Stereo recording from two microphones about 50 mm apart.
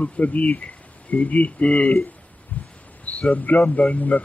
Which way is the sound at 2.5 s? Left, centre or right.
Left.